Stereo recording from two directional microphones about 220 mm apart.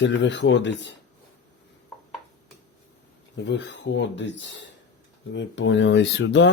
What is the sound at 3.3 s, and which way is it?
Speech, 55° left (ahead or behind).